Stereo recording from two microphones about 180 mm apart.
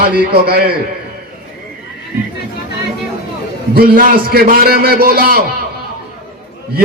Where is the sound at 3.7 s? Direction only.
55° right (ahead or behind).